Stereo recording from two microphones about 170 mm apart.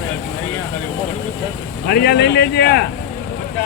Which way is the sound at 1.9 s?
70° left (ahead or behind).